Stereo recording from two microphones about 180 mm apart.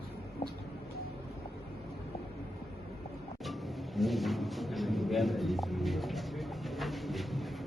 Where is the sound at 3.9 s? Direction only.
Centre (ahead or behind).